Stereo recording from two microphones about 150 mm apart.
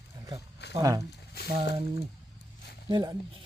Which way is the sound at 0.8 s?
20° right (ahead or behind).